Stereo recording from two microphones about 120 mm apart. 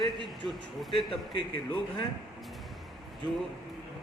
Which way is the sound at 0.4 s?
Centre (ahead or behind).